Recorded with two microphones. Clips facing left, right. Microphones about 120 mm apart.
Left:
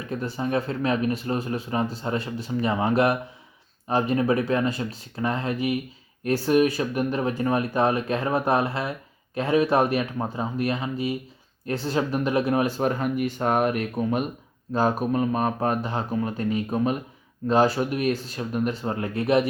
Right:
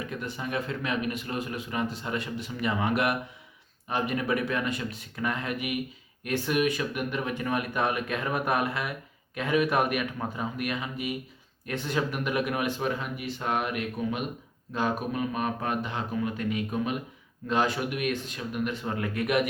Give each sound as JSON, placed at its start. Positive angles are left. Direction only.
{"t": 0.1, "sound": "speech", "side_deg": 35}